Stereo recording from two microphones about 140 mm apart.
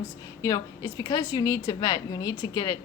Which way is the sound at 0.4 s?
25° left (ahead or behind).